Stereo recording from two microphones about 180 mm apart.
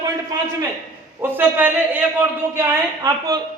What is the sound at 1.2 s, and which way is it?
A man's voice, 10° right (ahead or behind).